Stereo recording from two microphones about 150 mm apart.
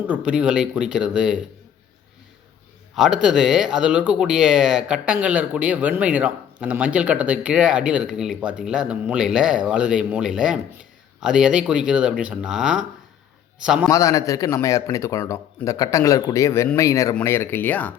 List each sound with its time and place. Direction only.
0.1 s speech: 5° right (ahead or behind)
2.9 s speech: centre (ahead or behind)
13.9 s a man's voice: 20° left (ahead or behind)